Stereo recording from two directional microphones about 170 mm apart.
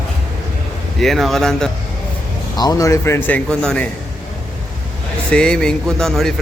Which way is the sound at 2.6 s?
20° left (ahead or behind).